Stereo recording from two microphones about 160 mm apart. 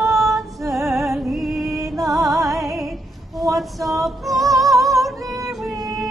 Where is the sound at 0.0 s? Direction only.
Centre (ahead or behind).